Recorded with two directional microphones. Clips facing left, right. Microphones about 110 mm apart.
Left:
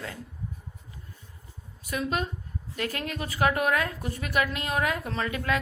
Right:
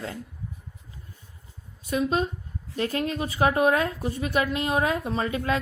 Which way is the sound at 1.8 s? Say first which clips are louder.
Right 5 dB; 25° right (ahead or behind).